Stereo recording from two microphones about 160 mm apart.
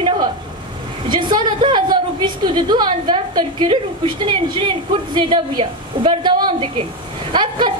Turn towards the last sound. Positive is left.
turn(degrees=-30)  # may be behind; listen again after turning